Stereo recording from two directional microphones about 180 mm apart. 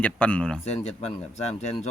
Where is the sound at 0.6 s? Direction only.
35° left (ahead or behind).